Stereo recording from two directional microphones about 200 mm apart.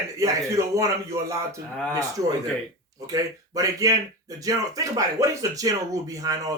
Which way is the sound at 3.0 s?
15° right (ahead or behind).